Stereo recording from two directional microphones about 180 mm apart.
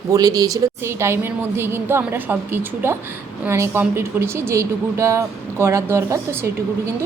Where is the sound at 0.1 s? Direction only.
20° right (ahead or behind).